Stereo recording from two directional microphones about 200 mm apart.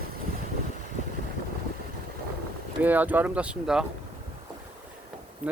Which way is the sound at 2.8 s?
10° right (ahead or behind).